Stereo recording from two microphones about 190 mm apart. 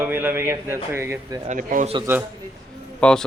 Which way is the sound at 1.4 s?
45° right (ahead or behind).